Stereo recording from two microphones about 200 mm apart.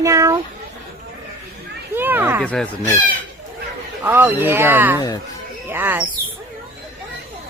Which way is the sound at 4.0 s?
10° right (ahead or behind).